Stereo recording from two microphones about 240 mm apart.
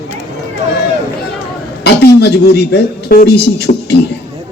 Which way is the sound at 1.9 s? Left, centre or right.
Left.